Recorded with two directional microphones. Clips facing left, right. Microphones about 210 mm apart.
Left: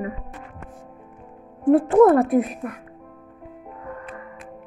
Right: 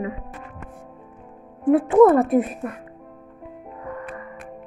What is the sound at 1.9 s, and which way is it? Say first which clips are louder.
Speech: right 2 dB; centre (ahead or behind).